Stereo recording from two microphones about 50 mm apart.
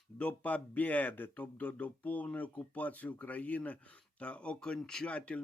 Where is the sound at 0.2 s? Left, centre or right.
Left.